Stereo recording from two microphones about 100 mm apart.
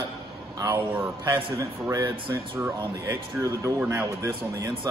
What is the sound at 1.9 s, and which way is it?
Speech, 35° right (ahead or behind).